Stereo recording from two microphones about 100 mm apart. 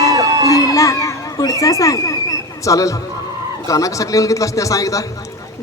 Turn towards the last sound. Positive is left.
turn(degrees=35)  # may be behind; listen again after turning